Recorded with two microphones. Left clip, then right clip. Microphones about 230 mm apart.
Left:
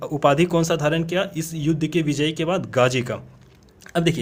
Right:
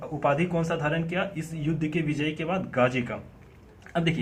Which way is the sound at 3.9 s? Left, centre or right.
Left.